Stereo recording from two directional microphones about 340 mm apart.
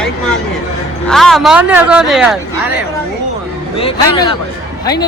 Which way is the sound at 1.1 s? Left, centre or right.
Centre.